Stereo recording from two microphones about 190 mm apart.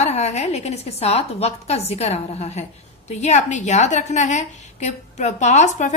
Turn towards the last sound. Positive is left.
turn(degrees=40)  # may be behind; listen again after turning